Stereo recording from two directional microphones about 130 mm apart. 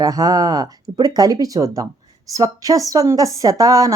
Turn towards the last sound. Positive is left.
turn(degrees=-25)  # may be behind; listen again after turning